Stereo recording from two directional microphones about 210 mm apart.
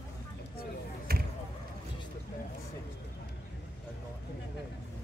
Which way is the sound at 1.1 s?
45° right (ahead or behind).